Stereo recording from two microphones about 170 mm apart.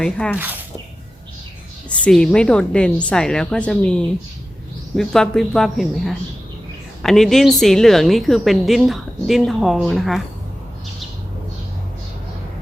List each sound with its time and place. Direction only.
0.0 s a woman's voice: 5° left (ahead or behind)
0.3 s speech: 10° right (ahead or behind)
1.9 s a woman's voice: 5° left (ahead or behind)